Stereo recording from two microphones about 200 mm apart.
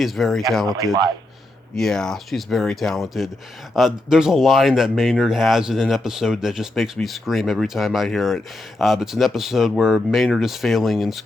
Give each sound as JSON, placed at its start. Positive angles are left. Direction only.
{"t": 0.0, "sound": "speech", "side_deg": 0}
{"t": 1.7, "sound": "speech", "side_deg": 0}